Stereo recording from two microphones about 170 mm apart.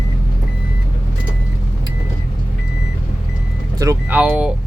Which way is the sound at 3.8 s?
20° right (ahead or behind).